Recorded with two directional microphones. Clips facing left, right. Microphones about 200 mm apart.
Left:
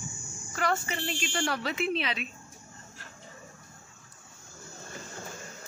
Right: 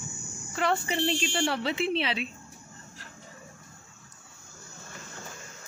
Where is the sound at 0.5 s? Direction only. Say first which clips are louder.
Right 3 dB; 30° right (ahead or behind).